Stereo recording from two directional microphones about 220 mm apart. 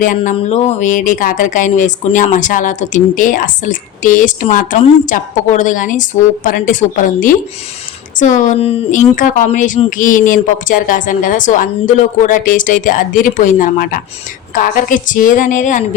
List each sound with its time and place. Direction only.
0.0 s speech: 35° left (ahead or behind)